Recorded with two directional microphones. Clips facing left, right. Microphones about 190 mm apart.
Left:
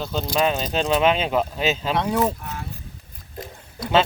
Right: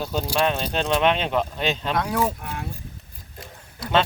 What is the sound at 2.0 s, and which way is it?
Speech, 25° left (ahead or behind).